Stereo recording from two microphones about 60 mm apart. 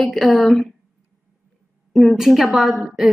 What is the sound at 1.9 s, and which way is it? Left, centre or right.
Speech, centre.